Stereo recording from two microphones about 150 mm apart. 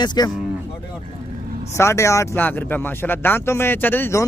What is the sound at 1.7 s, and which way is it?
Speech, 20° left (ahead or behind).